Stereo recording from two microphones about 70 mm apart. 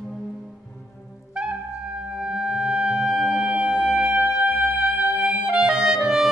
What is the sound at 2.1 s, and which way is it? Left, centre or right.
Music, centre.